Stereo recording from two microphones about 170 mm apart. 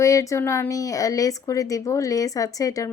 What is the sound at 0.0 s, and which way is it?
Speech, 20° left (ahead or behind).